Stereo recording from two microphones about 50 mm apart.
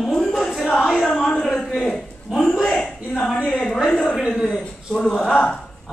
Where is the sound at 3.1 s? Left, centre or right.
Centre.